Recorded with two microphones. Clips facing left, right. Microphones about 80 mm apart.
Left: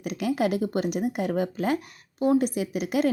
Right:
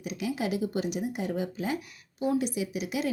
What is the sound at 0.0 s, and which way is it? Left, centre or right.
A woman's voice, left.